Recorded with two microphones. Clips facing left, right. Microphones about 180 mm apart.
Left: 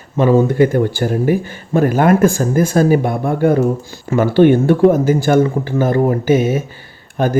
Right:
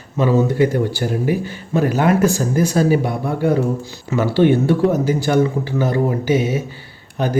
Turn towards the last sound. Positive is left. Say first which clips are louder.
# left 4 dB
turn(degrees=50)  # may be behind; listen again after turning